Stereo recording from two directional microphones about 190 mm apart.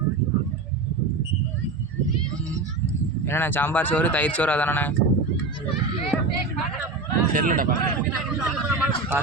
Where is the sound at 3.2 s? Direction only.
10° left (ahead or behind).